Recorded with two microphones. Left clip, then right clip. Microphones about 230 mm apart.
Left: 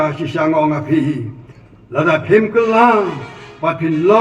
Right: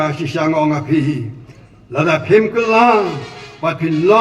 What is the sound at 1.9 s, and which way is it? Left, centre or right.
Speech, right.